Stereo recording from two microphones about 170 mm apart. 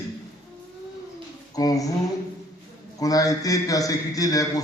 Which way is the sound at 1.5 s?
20° left (ahead or behind).